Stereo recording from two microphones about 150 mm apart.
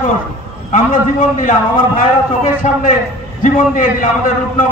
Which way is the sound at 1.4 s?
65° left (ahead or behind).